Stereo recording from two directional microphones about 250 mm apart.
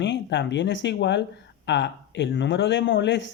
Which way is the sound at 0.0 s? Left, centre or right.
Left.